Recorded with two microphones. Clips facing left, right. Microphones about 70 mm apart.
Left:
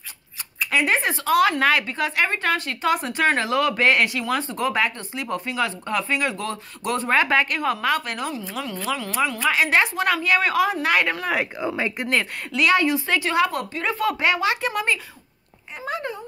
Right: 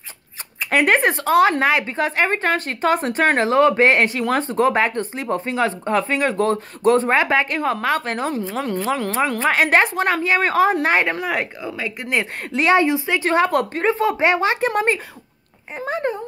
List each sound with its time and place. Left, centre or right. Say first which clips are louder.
0.6 s speech: right 5 dB; right
1.2 s a woman's voice: even; right
11.6 s speech: left 2 dB; left
12.4 s speech: right 4 dB; right
13.2 s a woman's voice: right 5 dB; right
13.5 s a woman's voice: right 8 dB; right
13.8 s a woman's voice: right 2 dB; right